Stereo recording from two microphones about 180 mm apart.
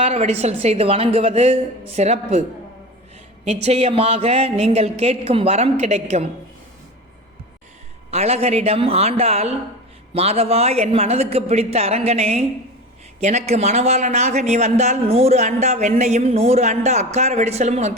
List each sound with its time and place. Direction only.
0.0 s a man's voice: 35° right (ahead or behind)
3.4 s a man's voice: 35° right (ahead or behind)
8.1 s a man's voice: 35° right (ahead or behind)